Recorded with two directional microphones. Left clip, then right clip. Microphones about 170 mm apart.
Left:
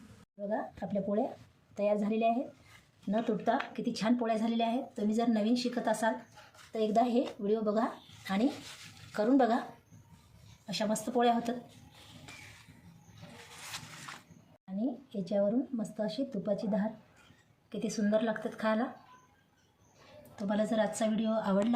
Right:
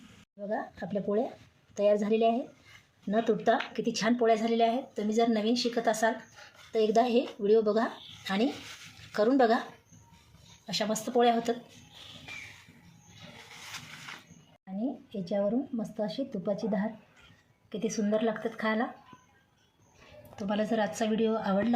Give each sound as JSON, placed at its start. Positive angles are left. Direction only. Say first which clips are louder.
{"t": 0.5, "sound": "speech", "louder": "right 2 dB", "side_deg": -45}
{"t": 10.7, "sound": "speech", "louder": "right 3 dB", "side_deg": -45}
{"t": 14.8, "sound": "a woman's voice", "louder": "right 1 dB", "side_deg": -40}
{"t": 20.3, "sound": "a woman's voice", "louder": "right 1 dB", "side_deg": -35}